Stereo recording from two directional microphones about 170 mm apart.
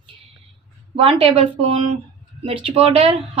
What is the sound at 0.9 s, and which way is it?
Speech, 35° right (ahead or behind).